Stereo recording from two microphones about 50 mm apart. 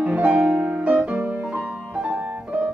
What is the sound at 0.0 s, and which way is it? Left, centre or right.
Music, right.